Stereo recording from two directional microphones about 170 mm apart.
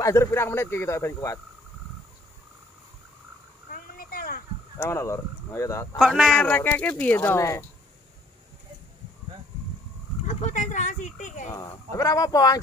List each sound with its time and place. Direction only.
0.0 s speech: 15° left (ahead or behind)
3.7 s a sound: 55° left (ahead or behind)
4.7 s speech: 15° left (ahead or behind)
5.9 s a man's voice: centre (ahead or behind)
6.3 s speech: 10° left (ahead or behind)
10.2 s speech: 45° left (ahead or behind)
11.5 s speech: 20° left (ahead or behind)